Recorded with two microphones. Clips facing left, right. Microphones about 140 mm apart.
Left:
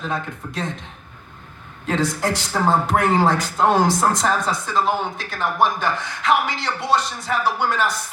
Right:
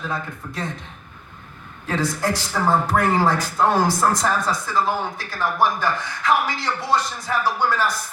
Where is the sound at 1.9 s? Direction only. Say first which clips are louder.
Left 1 dB; 20° left (ahead or behind).